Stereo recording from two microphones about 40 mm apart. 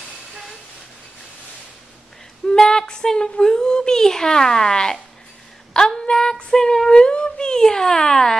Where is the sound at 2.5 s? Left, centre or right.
Centre.